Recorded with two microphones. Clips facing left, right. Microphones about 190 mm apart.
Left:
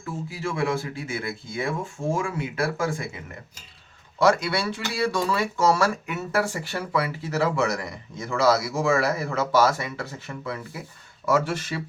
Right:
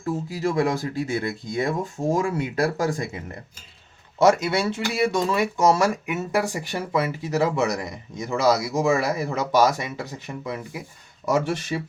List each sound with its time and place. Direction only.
0.0 s speech: 40° right (ahead or behind)
4.2 s speech: 20° right (ahead or behind)